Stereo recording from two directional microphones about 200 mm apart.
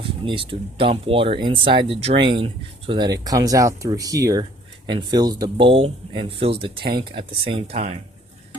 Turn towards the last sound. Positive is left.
turn(degrees=-30)  # may be behind; listen again after turning